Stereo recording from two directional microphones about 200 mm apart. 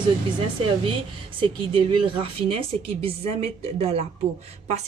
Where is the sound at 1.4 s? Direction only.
25° right (ahead or behind).